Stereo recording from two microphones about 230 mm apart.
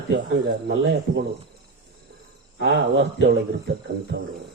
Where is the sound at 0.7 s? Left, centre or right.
Right.